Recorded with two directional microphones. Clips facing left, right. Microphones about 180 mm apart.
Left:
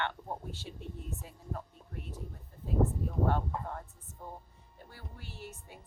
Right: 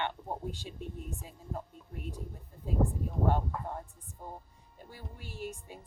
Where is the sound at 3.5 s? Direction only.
20° left (ahead or behind).